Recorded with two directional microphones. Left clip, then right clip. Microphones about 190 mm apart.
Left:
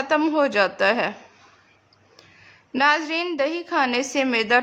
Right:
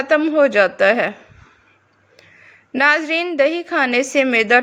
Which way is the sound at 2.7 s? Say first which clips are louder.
Right 4 dB; 15° right (ahead or behind).